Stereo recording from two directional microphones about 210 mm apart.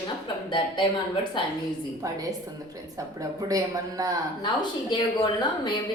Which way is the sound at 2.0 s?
15° right (ahead or behind).